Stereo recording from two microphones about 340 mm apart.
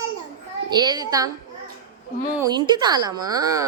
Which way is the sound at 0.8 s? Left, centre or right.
Centre.